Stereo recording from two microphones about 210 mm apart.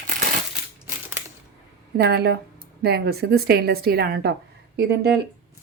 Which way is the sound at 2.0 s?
50° right (ahead or behind).